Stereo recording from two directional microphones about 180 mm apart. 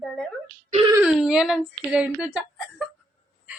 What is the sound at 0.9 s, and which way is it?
Speech, 5° right (ahead or behind).